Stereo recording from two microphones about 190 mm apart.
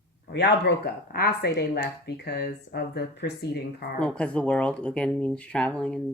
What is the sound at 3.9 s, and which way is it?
Speech, 5° left (ahead or behind).